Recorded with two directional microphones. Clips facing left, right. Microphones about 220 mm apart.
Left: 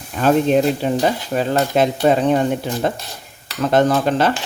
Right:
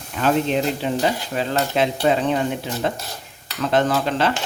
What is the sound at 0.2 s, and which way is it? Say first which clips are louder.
Stir: left 5 dB; 45° left (ahead or behind).